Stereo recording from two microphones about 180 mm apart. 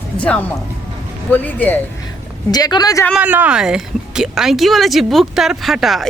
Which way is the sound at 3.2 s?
10° right (ahead or behind).